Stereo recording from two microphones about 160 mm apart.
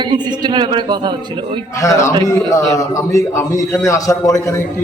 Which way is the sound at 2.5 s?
20° left (ahead or behind).